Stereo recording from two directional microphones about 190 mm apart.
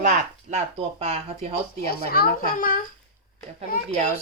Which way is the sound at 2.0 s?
50° left (ahead or behind).